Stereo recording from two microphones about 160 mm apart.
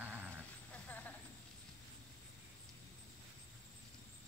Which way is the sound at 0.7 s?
10° left (ahead or behind).